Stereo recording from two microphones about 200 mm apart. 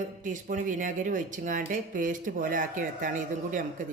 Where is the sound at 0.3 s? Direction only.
40° right (ahead or behind).